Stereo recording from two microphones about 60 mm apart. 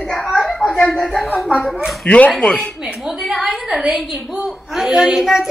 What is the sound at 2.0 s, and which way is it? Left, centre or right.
Speech, left.